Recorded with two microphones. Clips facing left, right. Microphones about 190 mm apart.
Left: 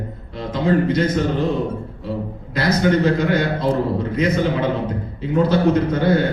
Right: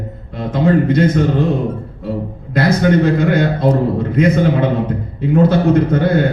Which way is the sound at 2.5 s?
55° right (ahead or behind).